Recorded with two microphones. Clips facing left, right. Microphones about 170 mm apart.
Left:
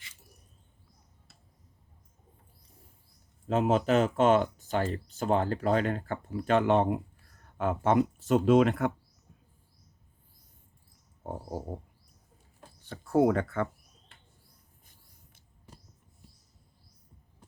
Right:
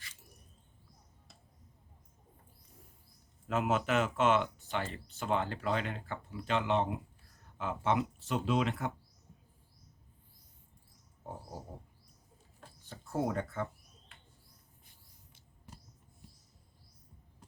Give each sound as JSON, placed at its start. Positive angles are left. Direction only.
{"t": 3.4, "sound": "speech", "side_deg": 30}
{"t": 11.2, "sound": "a sound", "side_deg": 60}
{"t": 12.8, "sound": "speech", "side_deg": 70}